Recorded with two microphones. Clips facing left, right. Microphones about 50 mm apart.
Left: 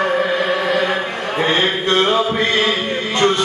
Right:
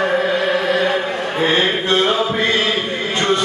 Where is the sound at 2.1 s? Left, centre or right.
Left.